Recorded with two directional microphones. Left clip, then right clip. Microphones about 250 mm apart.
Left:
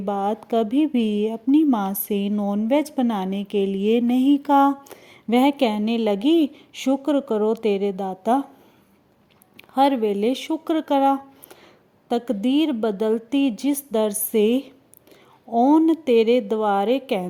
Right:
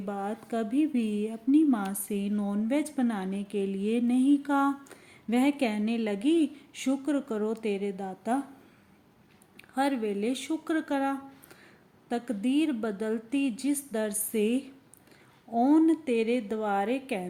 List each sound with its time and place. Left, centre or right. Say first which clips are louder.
0.0 s speech: left 11 dB; left
9.6 s speech: left 10 dB; left